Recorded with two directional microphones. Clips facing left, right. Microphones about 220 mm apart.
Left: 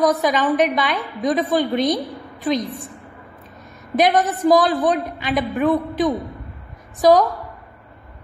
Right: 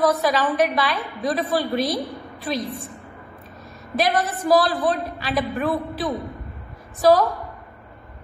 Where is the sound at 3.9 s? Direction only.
20° left (ahead or behind).